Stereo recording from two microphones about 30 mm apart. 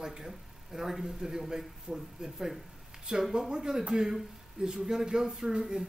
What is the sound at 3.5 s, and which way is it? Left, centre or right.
Speech, right.